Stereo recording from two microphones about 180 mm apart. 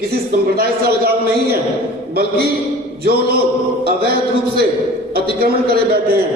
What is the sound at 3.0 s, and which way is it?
A man's voice, 60° right (ahead or behind).